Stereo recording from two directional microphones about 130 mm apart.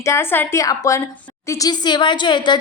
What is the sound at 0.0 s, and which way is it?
A woman's voice, 20° left (ahead or behind).